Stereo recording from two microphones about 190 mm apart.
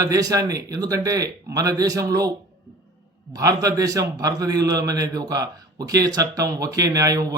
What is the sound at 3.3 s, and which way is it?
A man's voice, 20° right (ahead or behind).